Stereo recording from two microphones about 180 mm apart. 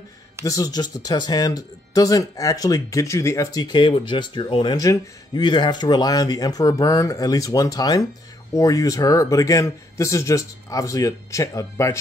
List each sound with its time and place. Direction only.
0.5 s speech: 20° left (ahead or behind)